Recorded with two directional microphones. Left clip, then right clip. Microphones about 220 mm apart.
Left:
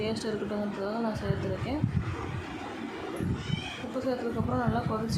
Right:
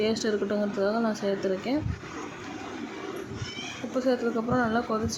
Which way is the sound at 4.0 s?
15° right (ahead or behind).